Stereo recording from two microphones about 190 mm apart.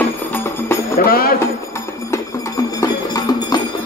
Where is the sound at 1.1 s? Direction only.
50° left (ahead or behind).